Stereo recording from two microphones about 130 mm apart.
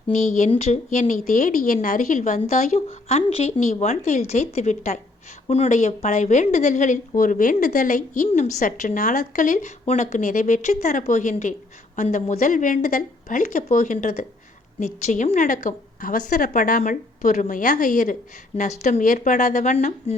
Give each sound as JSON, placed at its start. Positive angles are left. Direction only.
{"t": 0.1, "sound": "a woman's voice", "side_deg": 65}
{"t": 7.2, "sound": "speech", "side_deg": 90}
{"t": 8.4, "sound": "a woman's voice", "side_deg": 75}
{"t": 14.8, "sound": "a woman's voice", "side_deg": 65}